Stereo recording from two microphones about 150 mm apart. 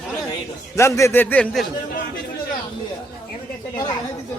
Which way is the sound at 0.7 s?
20° left (ahead or behind).